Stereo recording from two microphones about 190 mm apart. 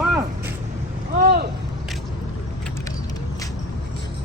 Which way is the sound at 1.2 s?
55° right (ahead or behind).